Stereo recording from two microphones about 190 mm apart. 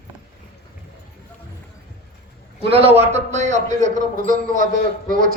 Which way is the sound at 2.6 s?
30° right (ahead or behind).